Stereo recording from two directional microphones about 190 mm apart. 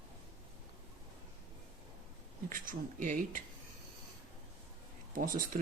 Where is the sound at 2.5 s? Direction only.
45° right (ahead or behind).